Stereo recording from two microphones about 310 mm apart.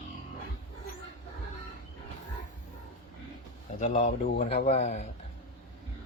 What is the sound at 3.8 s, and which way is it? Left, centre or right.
A man's voice, left.